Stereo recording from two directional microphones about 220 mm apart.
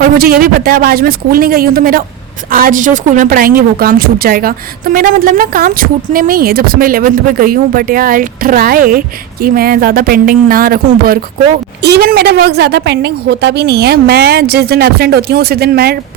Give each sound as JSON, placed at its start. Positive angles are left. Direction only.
{"t": 0.0, "sound": "a woman's voice", "side_deg": -40}